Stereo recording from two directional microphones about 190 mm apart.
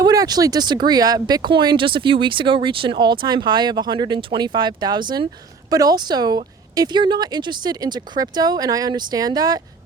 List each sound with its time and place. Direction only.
0.0 s speech: 20° right (ahead or behind)